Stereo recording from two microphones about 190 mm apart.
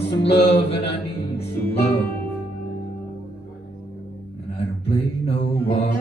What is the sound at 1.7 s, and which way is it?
Music, 30° left (ahead or behind).